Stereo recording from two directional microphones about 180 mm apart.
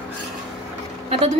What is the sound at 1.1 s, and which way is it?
Speech, 35° right (ahead or behind).